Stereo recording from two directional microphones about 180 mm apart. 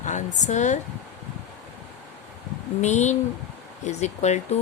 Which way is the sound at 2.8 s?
40° left (ahead or behind).